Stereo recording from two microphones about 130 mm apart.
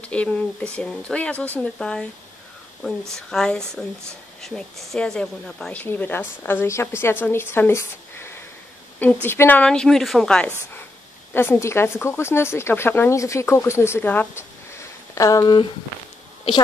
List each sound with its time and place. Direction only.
0.0 s a woman's voice: 10° left (ahead or behind)
3.2 s a woman's voice: 5° left (ahead or behind)
7.5 s a sound: 20° left (ahead or behind)
9.0 s a woman's voice: 15° left (ahead or behind)
11.3 s speech: 15° left (ahead or behind)